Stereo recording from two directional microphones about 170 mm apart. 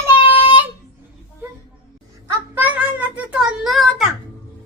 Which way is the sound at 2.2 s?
10° right (ahead or behind).